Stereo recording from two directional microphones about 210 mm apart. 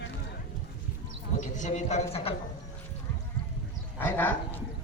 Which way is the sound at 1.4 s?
35° left (ahead or behind).